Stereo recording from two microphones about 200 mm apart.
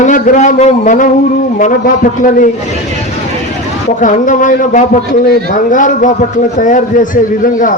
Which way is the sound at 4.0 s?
40° left (ahead or behind).